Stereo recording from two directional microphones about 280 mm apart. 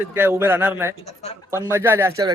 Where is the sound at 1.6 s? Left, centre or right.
Centre.